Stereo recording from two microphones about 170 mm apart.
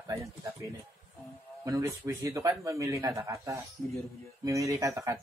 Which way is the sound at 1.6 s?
20° right (ahead or behind).